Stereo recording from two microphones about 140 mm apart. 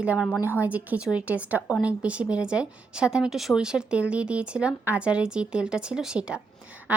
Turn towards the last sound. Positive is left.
turn(degrees=-10)  # may be behind; listen again after turning